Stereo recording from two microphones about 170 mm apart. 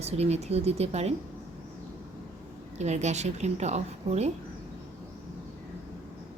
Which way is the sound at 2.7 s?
40° right (ahead or behind).